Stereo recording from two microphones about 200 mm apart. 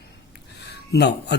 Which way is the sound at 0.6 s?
55° left (ahead or behind).